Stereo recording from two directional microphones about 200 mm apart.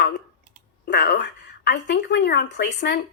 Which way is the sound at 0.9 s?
55° left (ahead or behind).